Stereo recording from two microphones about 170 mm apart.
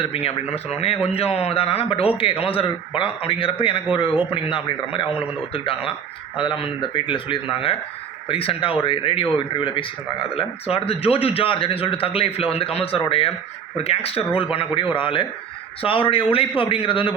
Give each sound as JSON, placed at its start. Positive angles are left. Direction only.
{"t": 0.0, "sound": "a man's voice", "side_deg": 35}